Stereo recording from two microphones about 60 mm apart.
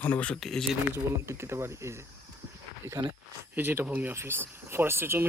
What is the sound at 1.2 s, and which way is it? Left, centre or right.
Speech, right.